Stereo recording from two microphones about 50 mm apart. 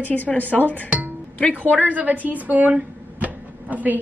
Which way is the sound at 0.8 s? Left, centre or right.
Right.